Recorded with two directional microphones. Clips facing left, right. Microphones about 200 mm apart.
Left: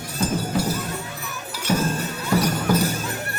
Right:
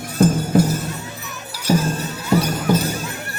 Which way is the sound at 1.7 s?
35° right (ahead or behind).